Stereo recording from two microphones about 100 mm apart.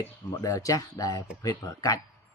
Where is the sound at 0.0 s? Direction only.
30° left (ahead or behind).